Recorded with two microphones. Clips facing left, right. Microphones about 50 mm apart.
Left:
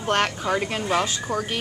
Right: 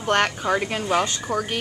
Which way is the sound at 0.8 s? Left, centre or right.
Centre.